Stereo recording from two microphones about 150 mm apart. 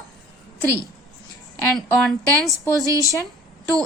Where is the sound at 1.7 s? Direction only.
Centre (ahead or behind).